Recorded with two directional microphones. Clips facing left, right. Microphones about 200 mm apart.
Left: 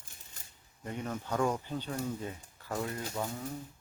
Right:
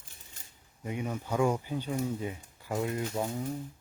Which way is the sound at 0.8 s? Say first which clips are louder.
Right 3 dB; 10° right (ahead or behind).